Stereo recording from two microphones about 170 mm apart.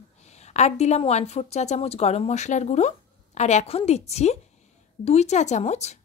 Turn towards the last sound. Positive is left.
turn(degrees=40)  # may be behind; listen again after turning